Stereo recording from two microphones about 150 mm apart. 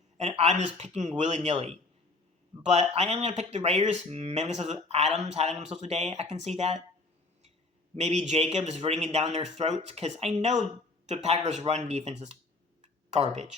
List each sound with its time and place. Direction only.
0.2 s speech: 50° right (ahead or behind)
7.9 s speech: 45° right (ahead or behind)